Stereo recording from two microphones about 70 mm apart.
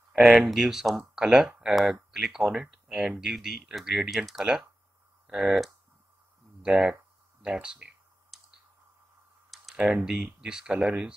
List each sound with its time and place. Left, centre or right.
0.1 s speech: centre
8.3 s clicking: centre
9.5 s computer keyboard: centre
10.2 s speech: centre